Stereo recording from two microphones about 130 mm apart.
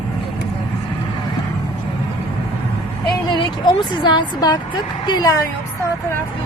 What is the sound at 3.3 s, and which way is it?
Speech, 35° left (ahead or behind).